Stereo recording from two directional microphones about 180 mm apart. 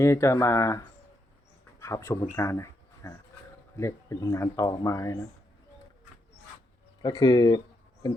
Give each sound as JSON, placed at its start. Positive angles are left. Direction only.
{"t": 0.0, "sound": "speech", "side_deg": 15}
{"t": 7.0, "sound": "speech", "side_deg": 20}